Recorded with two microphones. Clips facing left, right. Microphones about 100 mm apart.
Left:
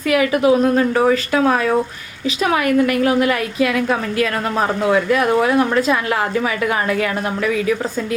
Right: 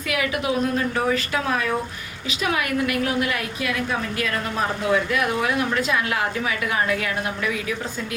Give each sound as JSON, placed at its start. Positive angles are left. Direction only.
{"t": 0.1, "sound": "a woman's voice", "side_deg": 45}
{"t": 5.1, "sound": "a woman's voice", "side_deg": 40}